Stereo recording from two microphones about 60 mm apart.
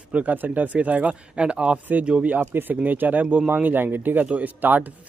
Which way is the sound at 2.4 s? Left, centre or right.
Right.